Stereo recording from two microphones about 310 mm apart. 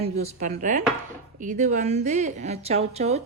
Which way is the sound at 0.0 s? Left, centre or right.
Right.